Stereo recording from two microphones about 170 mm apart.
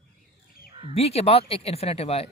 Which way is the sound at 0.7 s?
30° right (ahead or behind).